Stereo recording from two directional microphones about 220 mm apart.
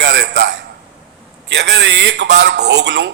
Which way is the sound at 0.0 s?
55° right (ahead or behind).